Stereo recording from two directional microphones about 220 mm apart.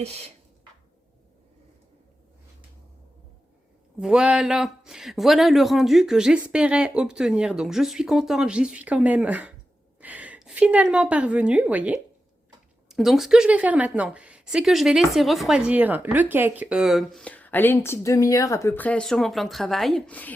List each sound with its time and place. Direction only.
4.0 s a woman's voice: 5° right (ahead or behind)